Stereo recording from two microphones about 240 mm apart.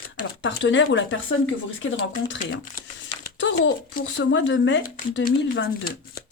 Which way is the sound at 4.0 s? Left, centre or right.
Left.